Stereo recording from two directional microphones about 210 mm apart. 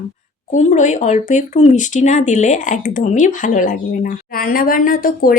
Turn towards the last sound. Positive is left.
turn(degrees=40)  # may be behind; listen again after turning